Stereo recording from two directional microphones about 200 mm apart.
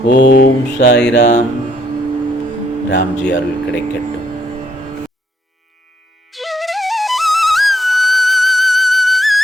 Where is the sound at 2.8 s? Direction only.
60° left (ahead or behind).